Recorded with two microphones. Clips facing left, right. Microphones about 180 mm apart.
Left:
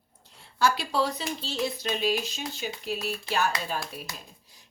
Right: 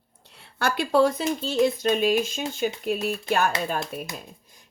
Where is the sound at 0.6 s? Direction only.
50° right (ahead or behind).